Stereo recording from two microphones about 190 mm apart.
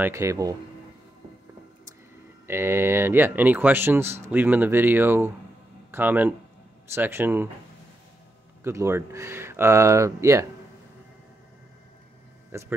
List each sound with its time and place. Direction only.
0.0 s speech: 15° right (ahead or behind)
2.4 s speech: 15° right (ahead or behind)
8.6 s speech: 15° right (ahead or behind)
12.4 s a sound: 10° right (ahead or behind)